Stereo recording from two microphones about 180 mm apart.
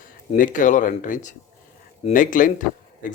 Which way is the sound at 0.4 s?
45° left (ahead or behind).